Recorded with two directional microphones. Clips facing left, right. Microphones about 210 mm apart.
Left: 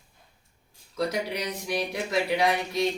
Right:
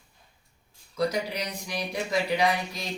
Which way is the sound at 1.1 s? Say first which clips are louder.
Left 1 dB; centre (ahead or behind).